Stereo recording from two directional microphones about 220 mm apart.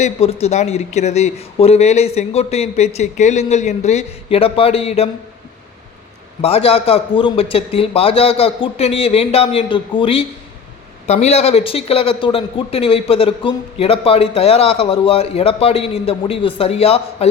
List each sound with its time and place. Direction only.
0.0 s a man's voice: 30° left (ahead or behind)
6.4 s a man's voice: 25° left (ahead or behind)